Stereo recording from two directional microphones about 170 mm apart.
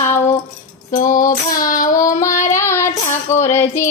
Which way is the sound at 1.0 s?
50° left (ahead or behind).